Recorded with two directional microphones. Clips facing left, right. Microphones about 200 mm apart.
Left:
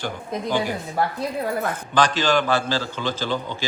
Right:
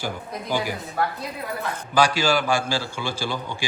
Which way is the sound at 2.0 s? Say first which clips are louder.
Even; 10° right (ahead or behind).